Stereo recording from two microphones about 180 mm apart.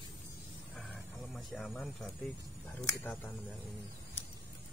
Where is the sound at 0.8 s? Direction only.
Centre (ahead or behind).